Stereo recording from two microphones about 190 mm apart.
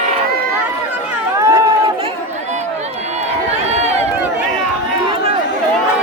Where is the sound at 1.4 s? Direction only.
15° right (ahead or behind).